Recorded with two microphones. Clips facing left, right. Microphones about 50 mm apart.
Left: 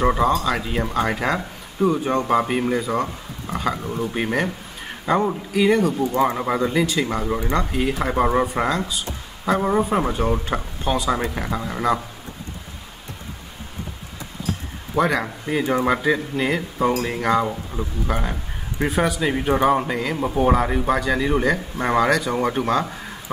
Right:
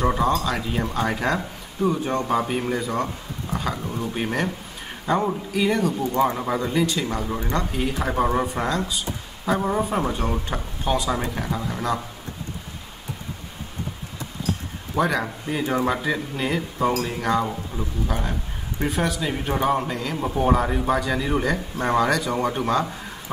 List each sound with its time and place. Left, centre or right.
0.0 s speech: centre
6.2 s speech: left
6.6 s speech: centre
8.6 s speech: centre
9.7 s speech: centre
11.2 s speech: centre
15.0 s speech: centre
18.9 s speech: centre